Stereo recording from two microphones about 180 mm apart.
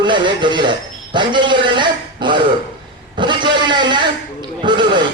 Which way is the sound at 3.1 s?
25° right (ahead or behind).